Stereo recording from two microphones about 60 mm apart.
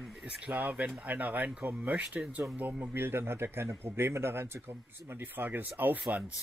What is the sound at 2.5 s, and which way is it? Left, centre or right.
Speech, right.